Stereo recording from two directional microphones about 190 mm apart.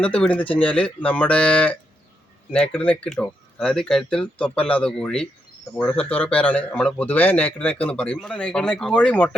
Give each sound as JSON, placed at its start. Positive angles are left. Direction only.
{"t": 0.0, "sound": "speech", "side_deg": 5}